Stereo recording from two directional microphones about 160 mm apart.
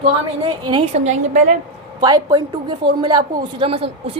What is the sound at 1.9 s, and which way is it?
A woman's voice, 25° right (ahead or behind).